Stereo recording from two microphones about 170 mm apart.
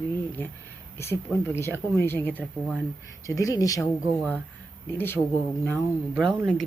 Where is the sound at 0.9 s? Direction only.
15° left (ahead or behind).